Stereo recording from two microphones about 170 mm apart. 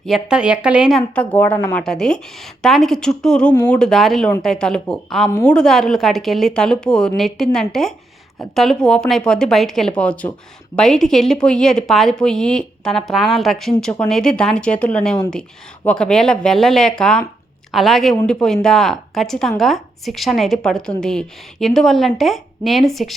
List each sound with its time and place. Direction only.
0.0 s speech: 5° right (ahead or behind)